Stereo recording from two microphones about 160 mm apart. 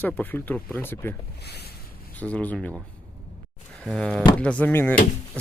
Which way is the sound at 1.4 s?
90° left.